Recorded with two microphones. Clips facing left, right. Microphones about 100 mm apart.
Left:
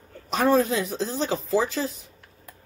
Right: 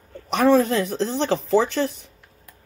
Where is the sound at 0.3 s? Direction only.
80° right.